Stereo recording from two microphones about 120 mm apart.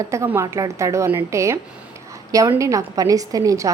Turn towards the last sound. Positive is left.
turn(degrees=-30)  # may be behind; listen again after turning